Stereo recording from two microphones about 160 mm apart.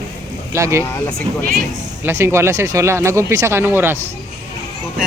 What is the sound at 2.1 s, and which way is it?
Speech, 15° right (ahead or behind).